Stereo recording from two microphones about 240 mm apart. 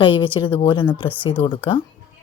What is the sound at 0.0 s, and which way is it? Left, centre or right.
A woman's voice, left.